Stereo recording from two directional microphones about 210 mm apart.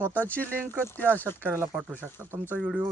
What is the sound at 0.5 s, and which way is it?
Speech, 10° right (ahead or behind).